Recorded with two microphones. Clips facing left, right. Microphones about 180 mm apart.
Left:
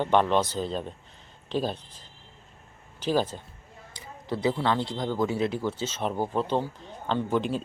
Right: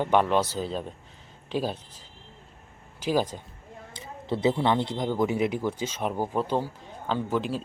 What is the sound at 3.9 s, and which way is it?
A man's voice, 25° right (ahead or behind).